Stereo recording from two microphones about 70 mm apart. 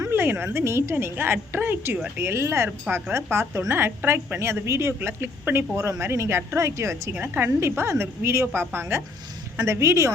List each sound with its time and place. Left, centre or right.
0.1 s a woman's voice: right
7.1 s a woman's voice: right